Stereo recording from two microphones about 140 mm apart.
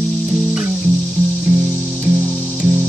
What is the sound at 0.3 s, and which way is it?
Music, 10° right (ahead or behind).